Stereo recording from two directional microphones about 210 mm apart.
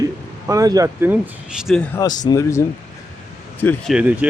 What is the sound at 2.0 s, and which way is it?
Speech, 20° left (ahead or behind).